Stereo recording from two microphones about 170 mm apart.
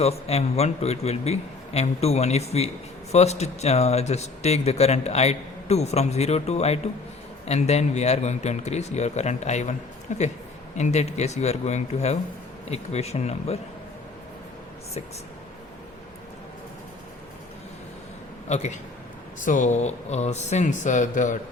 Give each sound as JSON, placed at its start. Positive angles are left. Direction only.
{"t": 0.0, "sound": "speech", "side_deg": 35}
{"t": 18.4, "sound": "speech", "side_deg": 40}